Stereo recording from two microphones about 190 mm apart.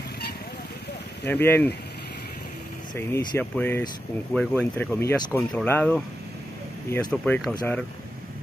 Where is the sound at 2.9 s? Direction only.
20° left (ahead or behind).